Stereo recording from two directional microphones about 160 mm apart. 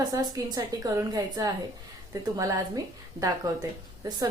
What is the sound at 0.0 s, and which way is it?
A woman's voice, 25° right (ahead or behind).